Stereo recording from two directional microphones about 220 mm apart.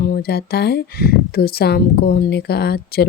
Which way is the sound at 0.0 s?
45° left (ahead or behind).